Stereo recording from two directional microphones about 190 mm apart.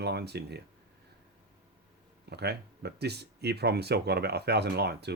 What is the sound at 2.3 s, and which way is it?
Speech, 60° right (ahead or behind).